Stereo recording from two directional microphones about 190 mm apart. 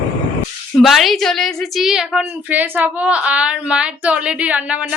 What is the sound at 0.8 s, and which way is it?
A woman's voice, centre (ahead or behind).